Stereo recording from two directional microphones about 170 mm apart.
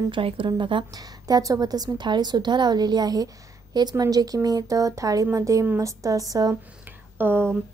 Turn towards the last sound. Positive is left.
turn(degrees=-15)  # may be behind; listen again after turning